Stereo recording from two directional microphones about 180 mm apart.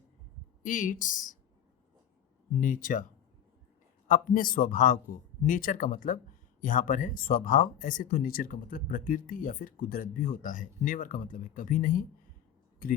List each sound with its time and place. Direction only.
0.6 s speech: 45° left (ahead or behind)
2.5 s speech: 45° left (ahead or behind)
4.1 s speech: 50° left (ahead or behind)